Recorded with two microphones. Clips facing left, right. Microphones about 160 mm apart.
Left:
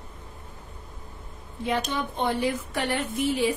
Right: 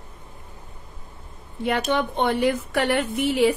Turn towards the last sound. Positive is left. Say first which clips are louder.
# right 5 dB
turn(degrees=-70)  # may be behind; listen again after turning